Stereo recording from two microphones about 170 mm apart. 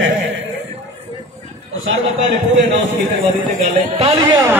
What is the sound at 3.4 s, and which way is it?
Speech, 45° right (ahead or behind).